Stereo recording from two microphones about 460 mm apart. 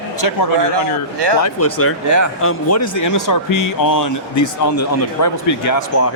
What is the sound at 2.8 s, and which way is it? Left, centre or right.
Speech, left.